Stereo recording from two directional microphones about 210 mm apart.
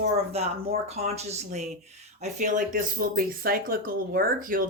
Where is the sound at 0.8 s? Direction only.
30° right (ahead or behind).